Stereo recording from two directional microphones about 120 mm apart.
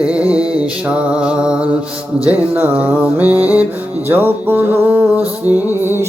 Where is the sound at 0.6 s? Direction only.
10° right (ahead or behind).